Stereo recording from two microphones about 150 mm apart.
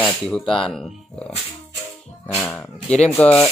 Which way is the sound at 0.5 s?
35° left (ahead or behind).